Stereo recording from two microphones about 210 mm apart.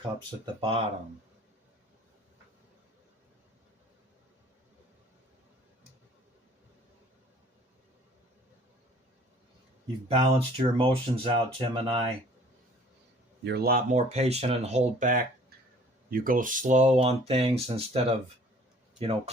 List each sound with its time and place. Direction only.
0.6 s speech: 25° right (ahead or behind)
10.1 s speech: 25° right (ahead or behind)
13.4 s speech: 50° right (ahead or behind); by 19.3 s 30° right (ahead or behind)